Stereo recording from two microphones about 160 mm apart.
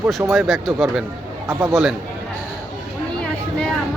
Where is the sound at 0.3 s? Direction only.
Centre (ahead or behind).